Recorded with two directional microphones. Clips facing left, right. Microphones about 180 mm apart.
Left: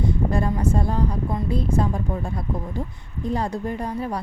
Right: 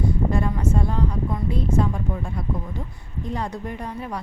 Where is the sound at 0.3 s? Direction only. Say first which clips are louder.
Left 1 dB; 35° left (ahead or behind).